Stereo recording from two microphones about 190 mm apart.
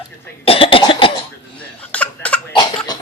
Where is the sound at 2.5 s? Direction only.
20° left (ahead or behind).